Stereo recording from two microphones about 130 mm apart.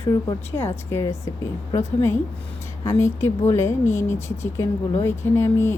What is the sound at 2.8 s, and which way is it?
Speech, 25° left (ahead or behind).